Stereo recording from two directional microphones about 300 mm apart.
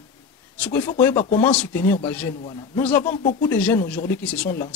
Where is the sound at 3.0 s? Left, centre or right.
Left.